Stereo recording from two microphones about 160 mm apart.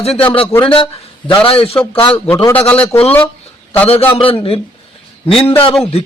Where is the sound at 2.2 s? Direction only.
15° left (ahead or behind).